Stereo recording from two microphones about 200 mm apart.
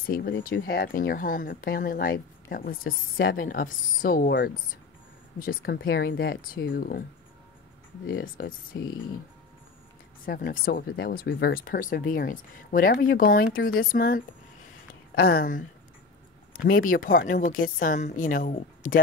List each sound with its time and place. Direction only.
0.0 s speech: 45° left (ahead or behind)
8.1 s speech: 45° left (ahead or behind)
8.7 s speech: 20° left (ahead or behind)
10.2 s a woman's voice: 45° left (ahead or behind)